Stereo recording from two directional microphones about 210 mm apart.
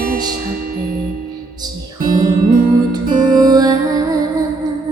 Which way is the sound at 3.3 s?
20° right (ahead or behind).